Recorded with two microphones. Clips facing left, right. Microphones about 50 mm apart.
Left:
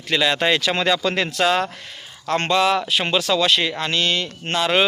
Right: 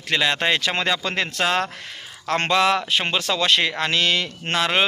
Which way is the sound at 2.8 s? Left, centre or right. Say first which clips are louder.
Left 2 dB; right.